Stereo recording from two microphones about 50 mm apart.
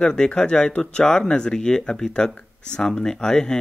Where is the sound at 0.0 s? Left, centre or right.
Centre.